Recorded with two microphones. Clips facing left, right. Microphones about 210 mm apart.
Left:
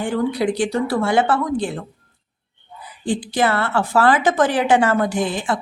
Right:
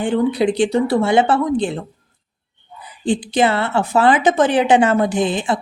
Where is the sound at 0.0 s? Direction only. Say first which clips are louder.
Right 3 dB; 25° right (ahead or behind).